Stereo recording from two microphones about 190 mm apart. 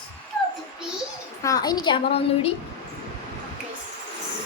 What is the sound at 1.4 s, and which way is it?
A woman's voice, 20° left (ahead or behind).